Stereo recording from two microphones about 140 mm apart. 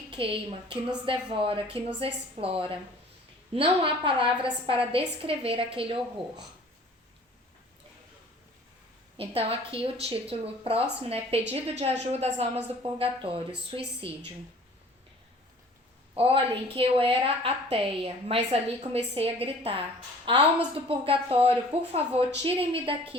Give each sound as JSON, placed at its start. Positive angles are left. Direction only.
{"t": 0.1, "sound": "a woman's voice", "side_deg": -40}
{"t": 9.1, "sound": "a woman's voice", "side_deg": -45}
{"t": 16.1, "sound": "a woman's voice", "side_deg": -45}